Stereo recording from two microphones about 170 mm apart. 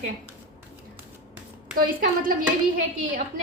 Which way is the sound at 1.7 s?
55° right (ahead or behind).